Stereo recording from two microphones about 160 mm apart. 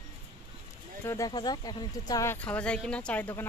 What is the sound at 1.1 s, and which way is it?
Speech, 25° left (ahead or behind).